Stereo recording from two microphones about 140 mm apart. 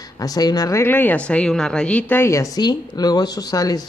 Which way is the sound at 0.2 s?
25° left (ahead or behind).